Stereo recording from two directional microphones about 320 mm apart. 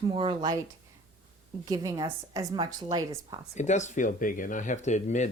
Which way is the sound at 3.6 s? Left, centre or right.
Left.